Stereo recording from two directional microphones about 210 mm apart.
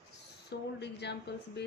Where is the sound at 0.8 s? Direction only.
55° left (ahead or behind).